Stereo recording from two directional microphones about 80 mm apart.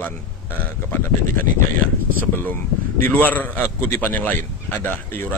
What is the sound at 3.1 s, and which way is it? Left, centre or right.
A man's voice, left.